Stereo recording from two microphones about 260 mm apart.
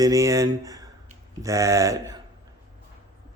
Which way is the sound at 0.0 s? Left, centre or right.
Centre.